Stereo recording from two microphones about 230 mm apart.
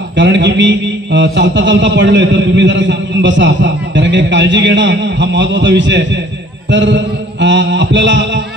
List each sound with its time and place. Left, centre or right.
0.1 s a man's voice: right